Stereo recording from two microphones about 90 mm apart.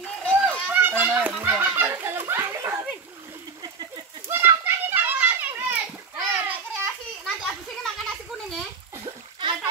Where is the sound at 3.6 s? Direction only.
50° right (ahead or behind).